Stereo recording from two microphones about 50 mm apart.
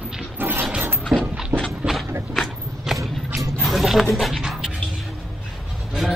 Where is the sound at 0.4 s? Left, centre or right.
Right.